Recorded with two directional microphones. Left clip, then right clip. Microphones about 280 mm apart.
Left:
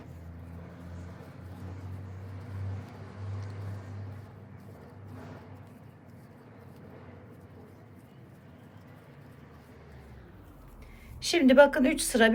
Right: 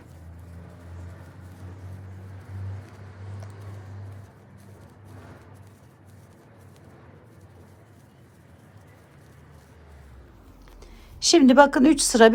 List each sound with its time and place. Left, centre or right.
11.2 s speech: centre